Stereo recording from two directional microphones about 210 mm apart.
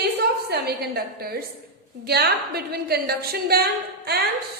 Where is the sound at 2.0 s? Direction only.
50° right (ahead or behind).